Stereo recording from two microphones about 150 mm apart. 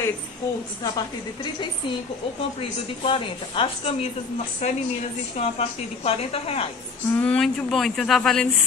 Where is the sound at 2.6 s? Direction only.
35° left (ahead or behind).